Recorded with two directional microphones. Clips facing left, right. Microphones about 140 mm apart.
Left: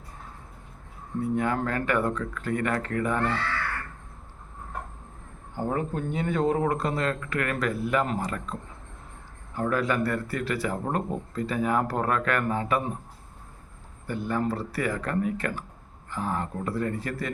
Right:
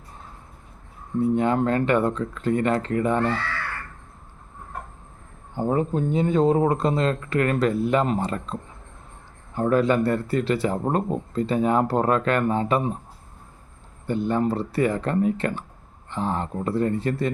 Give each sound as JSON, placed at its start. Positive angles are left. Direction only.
{"t": 1.2, "sound": "speech", "side_deg": -25}
{"t": 5.5, "sound": "speech", "side_deg": -20}
{"t": 9.6, "sound": "speech", "side_deg": -25}
{"t": 14.1, "sound": "speech", "side_deg": -25}